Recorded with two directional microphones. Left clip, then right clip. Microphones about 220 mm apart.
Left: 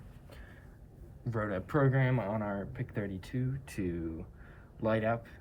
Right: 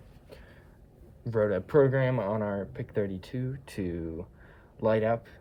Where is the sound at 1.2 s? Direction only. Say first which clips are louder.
Right 8 dB; 50° right (ahead or behind).